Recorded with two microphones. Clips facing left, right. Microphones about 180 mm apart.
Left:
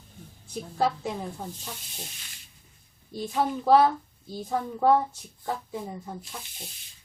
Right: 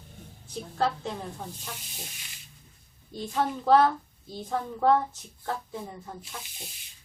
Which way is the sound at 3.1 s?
10° left (ahead or behind).